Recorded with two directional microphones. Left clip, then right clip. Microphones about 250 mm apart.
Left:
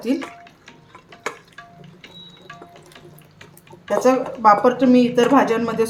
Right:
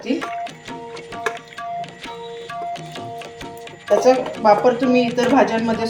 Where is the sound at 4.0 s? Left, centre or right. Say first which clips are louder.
Left 1 dB; left.